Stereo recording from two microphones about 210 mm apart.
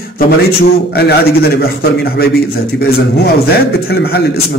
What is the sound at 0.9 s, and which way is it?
Speech, 50° left (ahead or behind).